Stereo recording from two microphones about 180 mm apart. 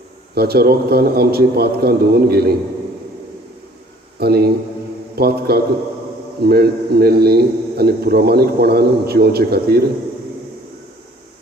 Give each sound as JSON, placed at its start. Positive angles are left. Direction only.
{"t": 0.3, "sound": "a man's voice", "side_deg": -60}
{"t": 4.2, "sound": "a man's voice", "side_deg": -60}